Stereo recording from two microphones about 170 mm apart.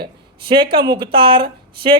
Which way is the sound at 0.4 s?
30° right (ahead or behind).